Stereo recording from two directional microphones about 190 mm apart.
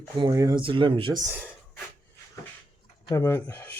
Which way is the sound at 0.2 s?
20° right (ahead or behind).